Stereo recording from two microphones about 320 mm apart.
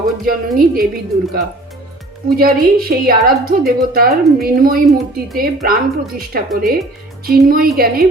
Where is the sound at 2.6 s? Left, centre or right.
Right.